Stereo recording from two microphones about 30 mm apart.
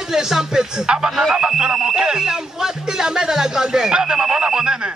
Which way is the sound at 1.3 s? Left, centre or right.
Right.